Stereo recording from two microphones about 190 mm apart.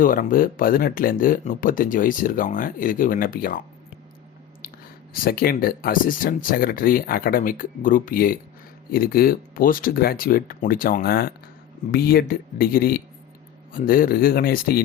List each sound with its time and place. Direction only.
0.0 s speech: 45° left (ahead or behind)
5.2 s speech: 50° left (ahead or behind)